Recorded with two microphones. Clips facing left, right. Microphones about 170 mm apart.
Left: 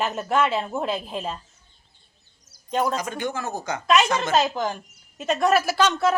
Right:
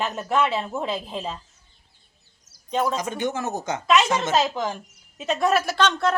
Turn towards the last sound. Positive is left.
turn(degrees=5)  # may be behind; listen again after turning